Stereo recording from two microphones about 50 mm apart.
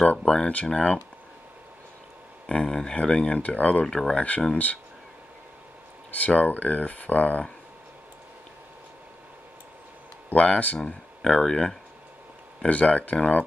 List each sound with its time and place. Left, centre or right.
0.2 s speech: centre
2.4 s speech: centre
3.8 s speech: centre
4.1 s speech: left
6.1 s speech: left
10.3 s speech: left
12.6 s speech: left